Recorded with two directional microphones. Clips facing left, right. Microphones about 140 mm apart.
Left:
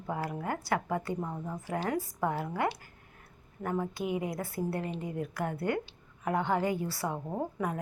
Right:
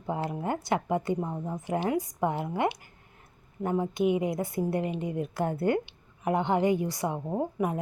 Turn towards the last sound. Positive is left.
turn(degrees=-15)  # may be behind; listen again after turning